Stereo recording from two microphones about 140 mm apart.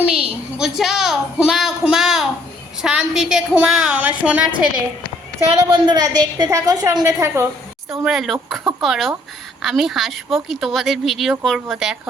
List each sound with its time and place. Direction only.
0.0 s a woman's voice: 10° right (ahead or behind)
5.7 s a woman's voice: 30° right (ahead or behind)
7.9 s speech: centre (ahead or behind)